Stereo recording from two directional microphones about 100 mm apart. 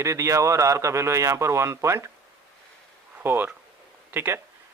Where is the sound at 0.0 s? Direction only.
30° right (ahead or behind).